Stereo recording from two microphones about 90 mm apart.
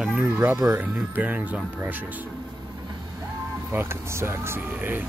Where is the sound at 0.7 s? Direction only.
20° right (ahead or behind).